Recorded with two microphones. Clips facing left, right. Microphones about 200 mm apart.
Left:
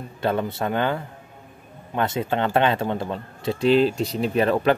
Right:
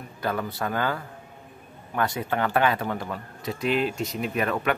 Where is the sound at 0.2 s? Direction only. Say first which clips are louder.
Left 5 dB; 25° left (ahead or behind).